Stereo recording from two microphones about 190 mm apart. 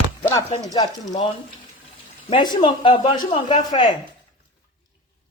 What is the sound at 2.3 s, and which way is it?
Speech, 25° left (ahead or behind).